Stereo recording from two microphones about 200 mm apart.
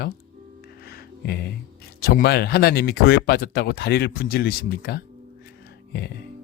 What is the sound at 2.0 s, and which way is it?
Speech, 50° left (ahead or behind).